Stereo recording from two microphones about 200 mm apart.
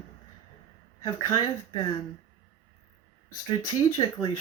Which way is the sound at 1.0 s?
15° left (ahead or behind).